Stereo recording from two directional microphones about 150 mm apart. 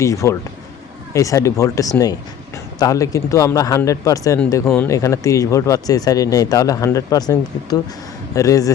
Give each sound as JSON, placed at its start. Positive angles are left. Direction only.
{"t": 0.0, "sound": "speech", "side_deg": 20}
{"t": 4.6, "sound": "speech", "side_deg": 5}
{"t": 4.9, "sound": "speech", "side_deg": 20}